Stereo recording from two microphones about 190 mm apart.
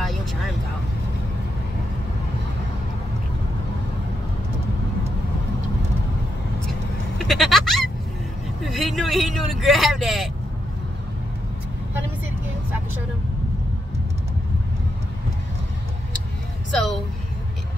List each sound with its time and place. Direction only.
0.0 s vehicle: centre (ahead or behind)
7.2 s bleat: centre (ahead or behind)
8.6 s vehicle: centre (ahead or behind)